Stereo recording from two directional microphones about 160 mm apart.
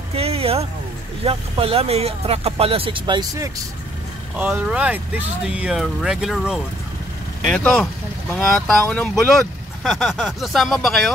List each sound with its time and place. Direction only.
0.1 s vehicle: 40° right (ahead or behind)
1.2 s speech: 35° right (ahead or behind)
4.4 s speech: 10° right (ahead or behind)